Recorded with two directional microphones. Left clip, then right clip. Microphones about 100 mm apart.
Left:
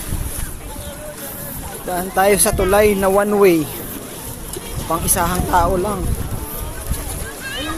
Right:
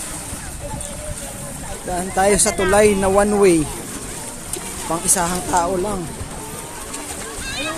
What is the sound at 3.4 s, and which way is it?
Speech, 35° right (ahead or behind).